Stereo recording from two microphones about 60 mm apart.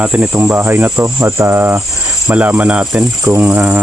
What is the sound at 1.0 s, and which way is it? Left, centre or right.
Speech, right.